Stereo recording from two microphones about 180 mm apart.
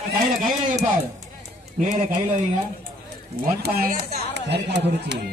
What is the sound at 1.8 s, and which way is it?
Speech, 45° right (ahead or behind).